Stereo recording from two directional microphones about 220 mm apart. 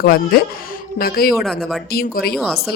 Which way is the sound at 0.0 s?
45° left (ahead or behind).